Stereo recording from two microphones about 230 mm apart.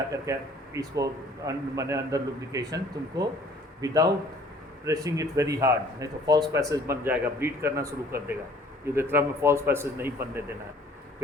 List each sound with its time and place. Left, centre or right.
0.1 s speech: centre